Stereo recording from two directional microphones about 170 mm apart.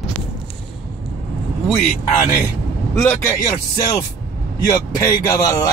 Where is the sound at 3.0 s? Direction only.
15° left (ahead or behind).